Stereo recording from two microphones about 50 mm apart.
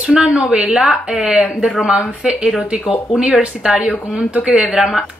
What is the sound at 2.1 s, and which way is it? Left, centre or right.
Speech, right.